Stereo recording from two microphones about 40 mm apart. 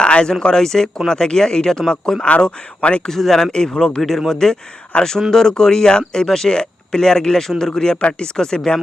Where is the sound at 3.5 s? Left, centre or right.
Centre.